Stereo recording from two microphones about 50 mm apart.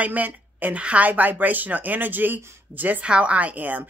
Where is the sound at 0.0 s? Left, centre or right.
Right.